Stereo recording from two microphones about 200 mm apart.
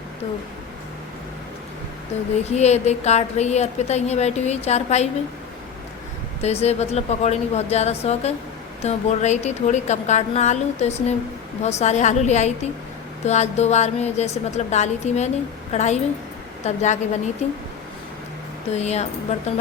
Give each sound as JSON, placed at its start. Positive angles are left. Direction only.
{"t": 2.4, "sound": "a woman's voice", "side_deg": 35}
{"t": 6.4, "sound": "a woman's voice", "side_deg": 30}
{"t": 18.7, "sound": "a woman's voice", "side_deg": 35}